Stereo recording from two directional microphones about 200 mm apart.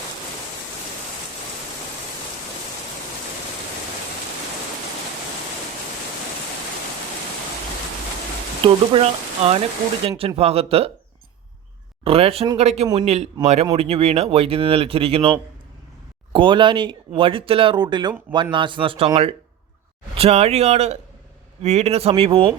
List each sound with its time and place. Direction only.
8.6 s speech: 25° right (ahead or behind)
12.0 s speech: 30° right (ahead or behind)